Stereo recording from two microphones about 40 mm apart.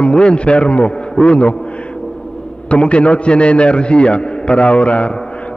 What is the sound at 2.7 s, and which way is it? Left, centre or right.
A man's voice, left.